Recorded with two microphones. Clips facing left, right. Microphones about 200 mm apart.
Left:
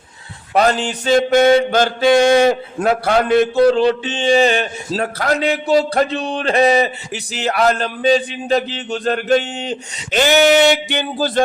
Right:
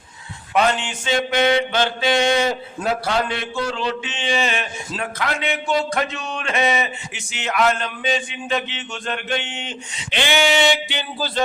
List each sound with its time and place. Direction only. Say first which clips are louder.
0.5 s mantra: left 4 dB; 40° left (ahead or behind)